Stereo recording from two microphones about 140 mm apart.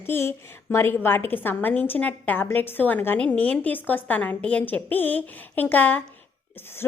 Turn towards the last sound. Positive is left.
turn(degrees=15)  # may be behind; listen again after turning